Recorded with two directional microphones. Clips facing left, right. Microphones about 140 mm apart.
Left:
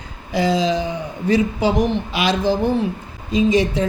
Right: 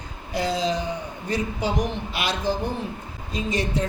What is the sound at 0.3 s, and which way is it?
Speech, 90° left.